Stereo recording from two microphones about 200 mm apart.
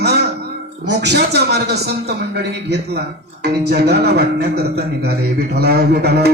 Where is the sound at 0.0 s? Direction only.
55° right (ahead or behind).